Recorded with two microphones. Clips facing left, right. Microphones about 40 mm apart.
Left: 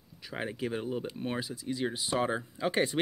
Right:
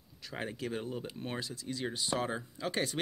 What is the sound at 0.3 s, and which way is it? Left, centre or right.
Speech, centre.